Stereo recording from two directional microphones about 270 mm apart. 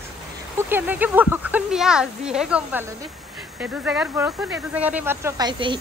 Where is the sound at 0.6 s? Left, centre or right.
Centre.